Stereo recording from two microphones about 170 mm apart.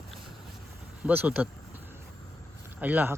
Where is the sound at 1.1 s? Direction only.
10° right (ahead or behind).